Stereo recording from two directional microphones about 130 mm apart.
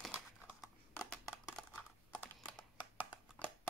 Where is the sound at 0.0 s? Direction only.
Centre (ahead or behind).